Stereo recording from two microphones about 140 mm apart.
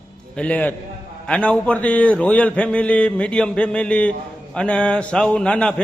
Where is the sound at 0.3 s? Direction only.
10° left (ahead or behind).